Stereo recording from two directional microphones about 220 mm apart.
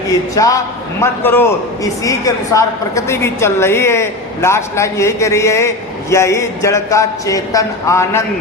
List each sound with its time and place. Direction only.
0.3 s a man's voice: 15° left (ahead or behind)